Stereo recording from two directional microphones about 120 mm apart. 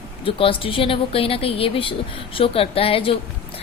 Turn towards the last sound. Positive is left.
turn(degrees=50)  # may be behind; listen again after turning